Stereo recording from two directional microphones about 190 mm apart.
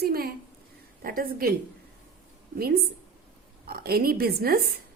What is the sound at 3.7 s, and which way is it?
A woman's voice, 55° right (ahead or behind).